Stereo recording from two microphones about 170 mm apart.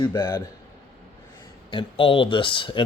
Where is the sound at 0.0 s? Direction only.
15° left (ahead or behind).